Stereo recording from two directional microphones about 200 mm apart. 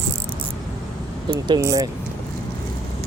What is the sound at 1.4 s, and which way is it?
Speech, 20° right (ahead or behind).